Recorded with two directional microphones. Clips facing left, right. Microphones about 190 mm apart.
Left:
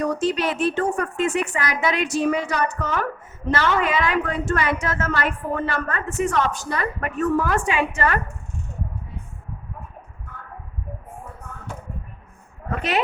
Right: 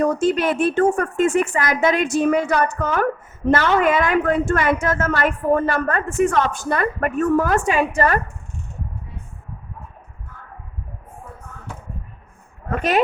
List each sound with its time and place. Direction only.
0.0 s speech: 50° right (ahead or behind)